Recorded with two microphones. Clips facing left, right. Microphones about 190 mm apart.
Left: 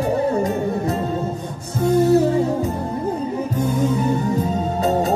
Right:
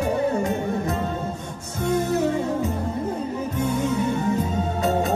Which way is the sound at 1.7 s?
35° left (ahead or behind).